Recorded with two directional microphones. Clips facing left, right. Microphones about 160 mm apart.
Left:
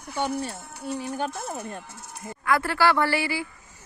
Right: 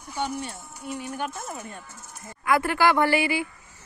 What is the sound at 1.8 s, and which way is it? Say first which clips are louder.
Speech: left 3 dB; 70° left (ahead or behind).